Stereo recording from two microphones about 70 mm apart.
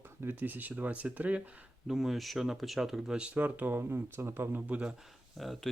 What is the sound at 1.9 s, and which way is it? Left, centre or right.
Speech, centre.